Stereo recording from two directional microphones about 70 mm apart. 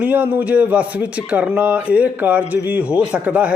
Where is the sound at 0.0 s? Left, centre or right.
Right.